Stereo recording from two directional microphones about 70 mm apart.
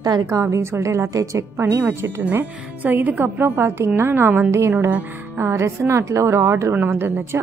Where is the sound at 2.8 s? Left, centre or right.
Right.